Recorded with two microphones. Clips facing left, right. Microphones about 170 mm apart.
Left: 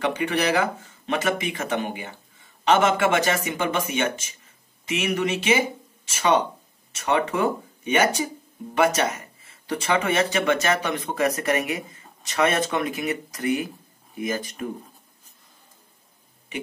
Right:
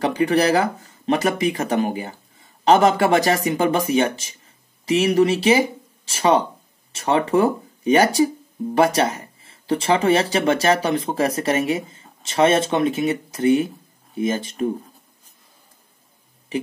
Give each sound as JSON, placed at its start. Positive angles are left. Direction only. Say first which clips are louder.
{"t": 0.0, "sound": "speech", "louder": "right 6 dB", "side_deg": -35}